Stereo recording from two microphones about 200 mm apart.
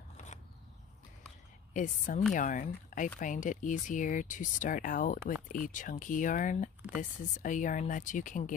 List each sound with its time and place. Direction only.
1.7 s speech: 40° left (ahead or behind)